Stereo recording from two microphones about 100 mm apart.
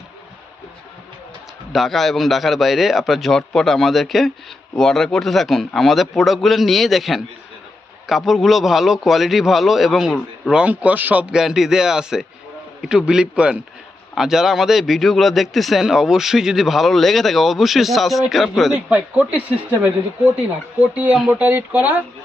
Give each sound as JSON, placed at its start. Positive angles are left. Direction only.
{"t": 1.7, "sound": "speech", "side_deg": 0}
{"t": 10.5, "sound": "a man's voice", "side_deg": -15}
{"t": 18.9, "sound": "a man's voice", "side_deg": -15}
{"t": 20.8, "sound": "a man's voice", "side_deg": -15}